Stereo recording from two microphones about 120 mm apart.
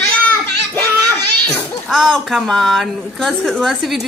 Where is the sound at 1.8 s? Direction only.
5° left (ahead or behind).